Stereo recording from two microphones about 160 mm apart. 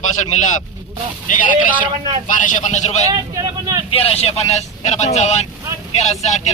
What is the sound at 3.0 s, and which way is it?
Speech, 20° right (ahead or behind).